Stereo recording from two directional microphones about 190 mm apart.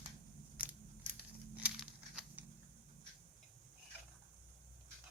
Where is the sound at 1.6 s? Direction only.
5° right (ahead or behind).